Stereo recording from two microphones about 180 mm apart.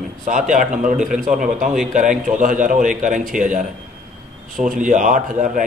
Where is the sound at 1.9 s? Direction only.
45° right (ahead or behind).